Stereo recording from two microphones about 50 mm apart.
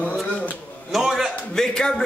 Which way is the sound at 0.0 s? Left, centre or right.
Left.